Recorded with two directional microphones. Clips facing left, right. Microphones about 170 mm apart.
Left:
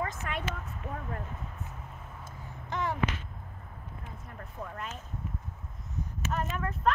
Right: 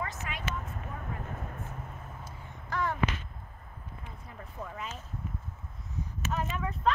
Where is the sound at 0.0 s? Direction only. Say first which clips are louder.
Left 3 dB; 55° left (ahead or behind).